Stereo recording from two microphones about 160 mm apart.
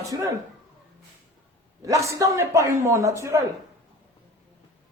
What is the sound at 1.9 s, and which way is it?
A man's voice, 20° right (ahead or behind).